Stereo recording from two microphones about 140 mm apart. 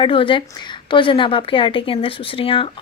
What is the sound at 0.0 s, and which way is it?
Speech, 40° left (ahead or behind).